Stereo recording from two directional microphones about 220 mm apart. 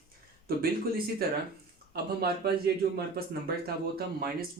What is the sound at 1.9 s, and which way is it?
Speech, 45° right (ahead or behind).